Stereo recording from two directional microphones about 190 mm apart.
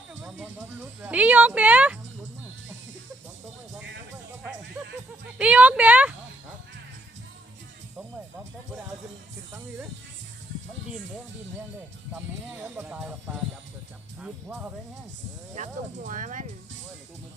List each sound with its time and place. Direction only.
0.3 s speech: 10° right (ahead or behind)
5.4 s speech: 5° right (ahead or behind)
12.1 s speech: 10° right (ahead or behind)
15.5 s speech: 40° right (ahead or behind)